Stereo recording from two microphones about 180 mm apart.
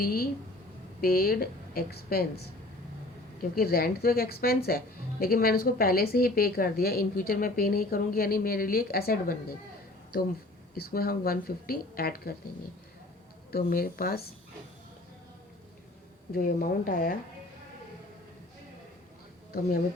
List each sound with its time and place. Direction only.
0.0 s a woman's voice: 55° left (ahead or behind)
3.5 s a woman's voice: 55° left (ahead or behind)
10.8 s a woman's voice: 55° left (ahead or behind)
13.5 s a woman's voice: 55° left (ahead or behind)
16.3 s speech: 50° left (ahead or behind)